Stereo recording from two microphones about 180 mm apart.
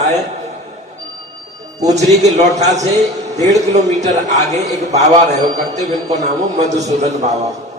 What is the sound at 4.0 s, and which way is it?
A man's voice, 40° right (ahead or behind).